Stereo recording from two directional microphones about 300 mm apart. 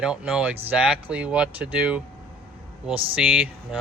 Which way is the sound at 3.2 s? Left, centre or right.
Centre.